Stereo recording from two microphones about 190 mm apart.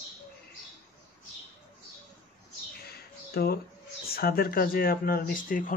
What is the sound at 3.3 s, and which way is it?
Speech, 55° left (ahead or behind).